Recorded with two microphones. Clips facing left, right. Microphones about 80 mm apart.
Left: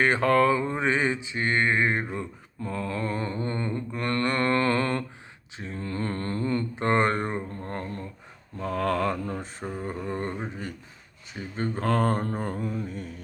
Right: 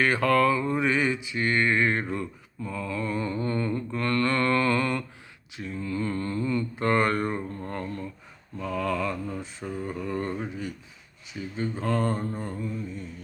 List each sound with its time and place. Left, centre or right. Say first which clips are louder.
0.0 s mantra: left 1 dB; left
2.6 s mantra: left 1 dB; left
5.7 s mantra: right 1 dB; left
6.7 s speech: even; left
7.7 s a sound: left 1 dB; left
8.5 s mantra: left 2 dB; left
9.7 s a sound: right 1 dB; left
11.3 s mantra: left 1 dB; left
11.9 s mantra: left 3 dB; left